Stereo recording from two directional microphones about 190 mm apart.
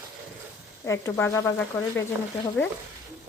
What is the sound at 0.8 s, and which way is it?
Speech, 15° left (ahead or behind).